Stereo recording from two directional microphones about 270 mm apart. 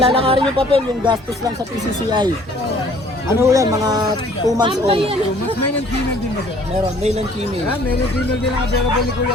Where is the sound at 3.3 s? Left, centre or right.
Centre.